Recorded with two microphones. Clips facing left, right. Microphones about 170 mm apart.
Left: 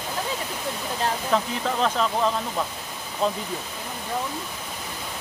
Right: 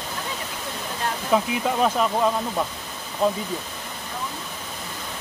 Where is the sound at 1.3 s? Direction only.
10° right (ahead or behind).